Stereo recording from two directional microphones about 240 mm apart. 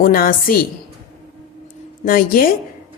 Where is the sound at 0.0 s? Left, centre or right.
Left.